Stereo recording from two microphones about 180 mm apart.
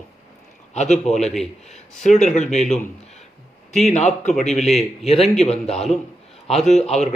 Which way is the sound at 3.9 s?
40° left (ahead or behind).